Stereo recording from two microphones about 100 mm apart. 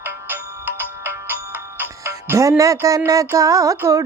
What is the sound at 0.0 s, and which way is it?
Ringtone, 20° right (ahead or behind).